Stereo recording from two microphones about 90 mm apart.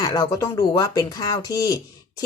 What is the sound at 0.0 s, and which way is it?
Speech, 50° left (ahead or behind).